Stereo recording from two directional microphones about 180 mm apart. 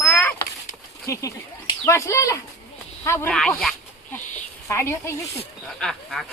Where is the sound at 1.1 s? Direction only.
20° left (ahead or behind).